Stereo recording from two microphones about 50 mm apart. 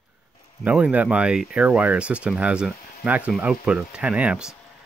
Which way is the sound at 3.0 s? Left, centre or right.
Right.